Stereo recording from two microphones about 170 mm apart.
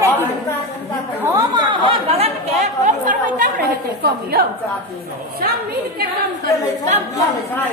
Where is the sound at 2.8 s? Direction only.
45° right (ahead or behind).